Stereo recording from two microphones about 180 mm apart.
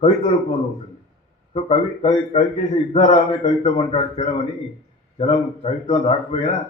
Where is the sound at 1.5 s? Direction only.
35° left (ahead or behind).